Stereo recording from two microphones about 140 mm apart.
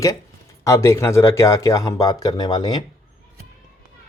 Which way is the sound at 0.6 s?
20° left (ahead or behind).